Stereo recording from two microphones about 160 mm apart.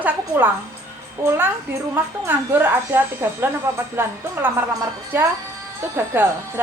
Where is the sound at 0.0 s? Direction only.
10° right (ahead or behind).